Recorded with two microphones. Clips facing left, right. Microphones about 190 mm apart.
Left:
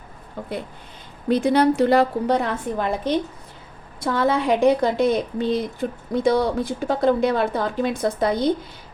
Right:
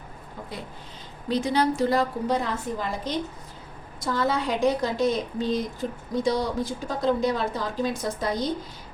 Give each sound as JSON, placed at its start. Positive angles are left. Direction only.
{"t": 1.3, "sound": "speech", "side_deg": 60}